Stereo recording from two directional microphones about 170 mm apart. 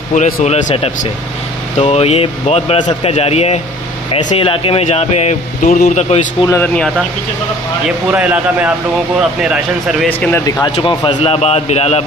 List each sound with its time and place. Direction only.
0.1 s a man's voice: 40° left (ahead or behind)
6.4 s speech: 15° left (ahead or behind)
8.1 s a man's voice: 10° right (ahead or behind)
10.0 s speech: 10° left (ahead or behind)
10.6 s a man's voice: 25° left (ahead or behind)